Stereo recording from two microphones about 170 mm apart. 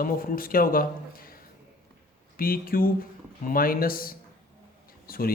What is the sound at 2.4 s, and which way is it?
A man's voice, 60° left (ahead or behind).